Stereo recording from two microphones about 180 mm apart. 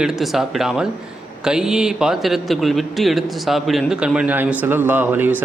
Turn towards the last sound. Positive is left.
turn(degrees=-10)  # may be behind; listen again after turning